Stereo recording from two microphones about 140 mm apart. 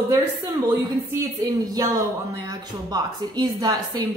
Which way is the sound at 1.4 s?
25° right (ahead or behind).